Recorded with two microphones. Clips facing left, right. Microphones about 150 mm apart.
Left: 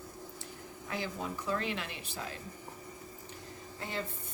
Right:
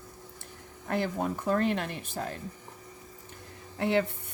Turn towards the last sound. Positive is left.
turn(degrees=-70)  # may be behind; listen again after turning